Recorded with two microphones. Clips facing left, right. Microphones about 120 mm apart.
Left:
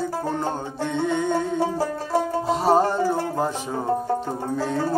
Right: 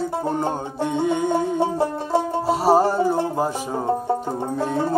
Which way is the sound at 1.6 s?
25° right (ahead or behind).